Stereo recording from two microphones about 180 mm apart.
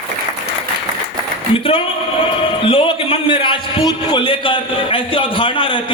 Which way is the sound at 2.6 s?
30° left (ahead or behind).